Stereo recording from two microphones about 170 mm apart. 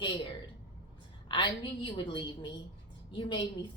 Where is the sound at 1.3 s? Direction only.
30° left (ahead or behind).